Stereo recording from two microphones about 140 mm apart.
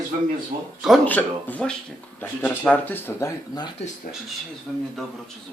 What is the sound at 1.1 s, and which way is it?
Speech, 10° left (ahead or behind).